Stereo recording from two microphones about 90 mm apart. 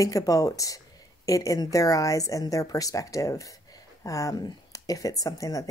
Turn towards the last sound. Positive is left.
turn(degrees=40)  # may be behind; listen again after turning